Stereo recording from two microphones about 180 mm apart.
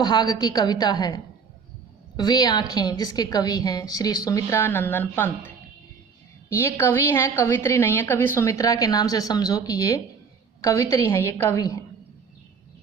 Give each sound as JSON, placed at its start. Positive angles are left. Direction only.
{"t": 0.0, "sound": "a woman's voice", "side_deg": 25}
{"t": 6.5, "sound": "a woman's voice", "side_deg": 15}